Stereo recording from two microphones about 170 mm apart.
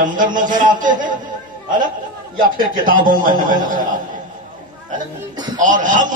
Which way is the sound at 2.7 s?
55° right (ahead or behind).